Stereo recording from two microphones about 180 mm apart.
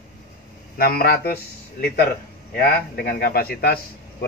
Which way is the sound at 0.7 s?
55° left (ahead or behind).